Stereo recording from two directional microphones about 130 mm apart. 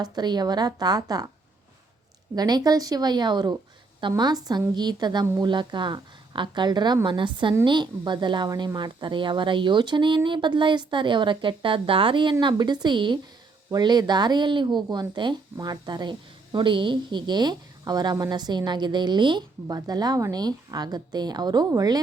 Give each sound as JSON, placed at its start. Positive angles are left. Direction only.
{"t": 0.0, "sound": "speech", "side_deg": -35}
{"t": 2.3, "sound": "speech", "side_deg": -30}